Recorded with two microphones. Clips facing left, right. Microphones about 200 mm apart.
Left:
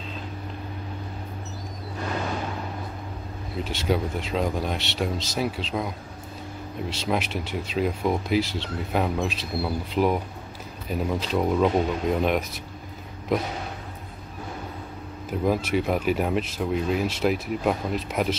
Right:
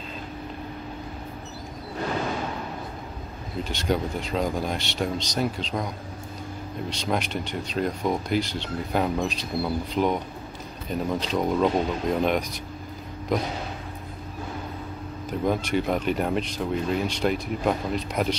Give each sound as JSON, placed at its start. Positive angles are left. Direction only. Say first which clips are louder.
{"t": 3.6, "sound": "speech", "louder": "left 1 dB", "side_deg": 5}
{"t": 15.2, "sound": "speech", "louder": "left 1 dB", "side_deg": 5}